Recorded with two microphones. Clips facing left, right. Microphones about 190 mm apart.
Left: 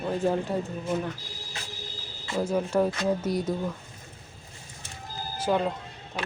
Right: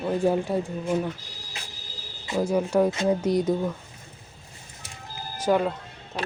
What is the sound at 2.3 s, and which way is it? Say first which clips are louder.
Speech: right 3 dB; 10° right (ahead or behind).